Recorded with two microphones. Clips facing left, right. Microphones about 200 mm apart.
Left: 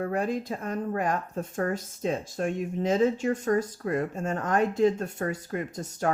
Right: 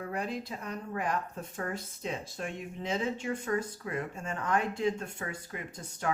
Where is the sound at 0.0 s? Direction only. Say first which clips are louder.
Left 7 dB; 45° left (ahead or behind).